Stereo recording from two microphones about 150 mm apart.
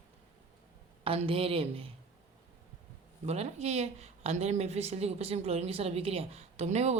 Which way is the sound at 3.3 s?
45° right (ahead or behind).